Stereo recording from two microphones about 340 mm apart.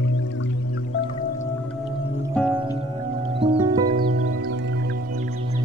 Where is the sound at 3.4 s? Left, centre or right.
Centre.